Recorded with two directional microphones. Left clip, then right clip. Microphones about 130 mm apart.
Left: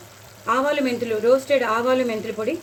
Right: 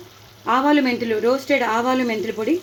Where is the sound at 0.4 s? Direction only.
70° right (ahead or behind).